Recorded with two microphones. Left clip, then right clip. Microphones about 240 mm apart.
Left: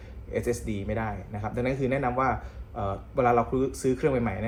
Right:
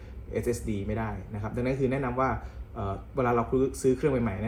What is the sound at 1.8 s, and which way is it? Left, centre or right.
Speech, centre.